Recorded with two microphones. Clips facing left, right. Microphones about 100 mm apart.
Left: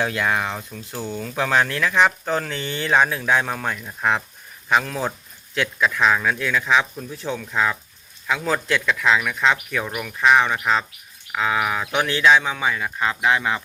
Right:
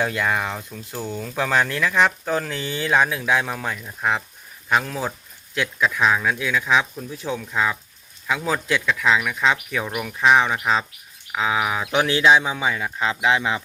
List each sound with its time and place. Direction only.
0.0 s speech: centre (ahead or behind); by 13.6 s 15° right (ahead or behind)